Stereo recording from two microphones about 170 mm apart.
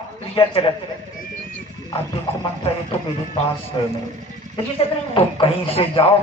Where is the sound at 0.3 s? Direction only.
30° left (ahead or behind).